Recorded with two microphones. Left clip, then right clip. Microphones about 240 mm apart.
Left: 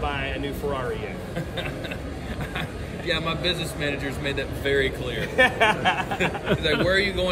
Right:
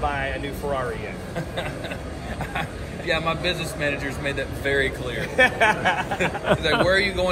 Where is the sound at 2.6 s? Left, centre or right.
Centre.